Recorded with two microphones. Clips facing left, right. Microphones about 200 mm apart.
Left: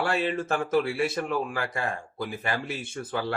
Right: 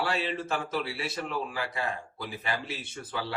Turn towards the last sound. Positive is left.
turn(degrees=50)  # may be behind; listen again after turning